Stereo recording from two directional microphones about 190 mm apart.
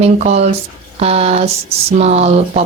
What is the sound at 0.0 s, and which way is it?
Speech, 35° right (ahead or behind).